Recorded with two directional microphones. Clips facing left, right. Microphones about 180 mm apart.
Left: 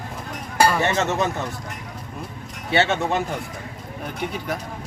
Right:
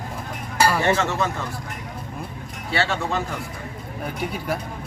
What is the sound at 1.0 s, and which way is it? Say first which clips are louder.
Speech: left 2 dB; 20° left (ahead or behind).